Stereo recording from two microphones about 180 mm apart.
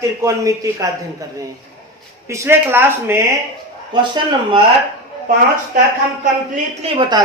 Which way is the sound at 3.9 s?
25° right (ahead or behind).